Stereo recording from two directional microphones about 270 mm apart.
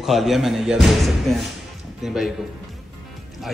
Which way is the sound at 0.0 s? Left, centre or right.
Centre.